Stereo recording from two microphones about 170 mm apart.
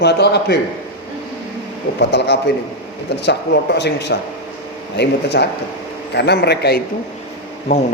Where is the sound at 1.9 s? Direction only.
90° left.